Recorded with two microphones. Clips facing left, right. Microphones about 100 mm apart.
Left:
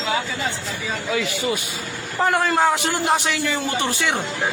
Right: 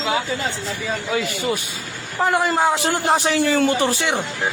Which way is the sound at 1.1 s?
40° right (ahead or behind).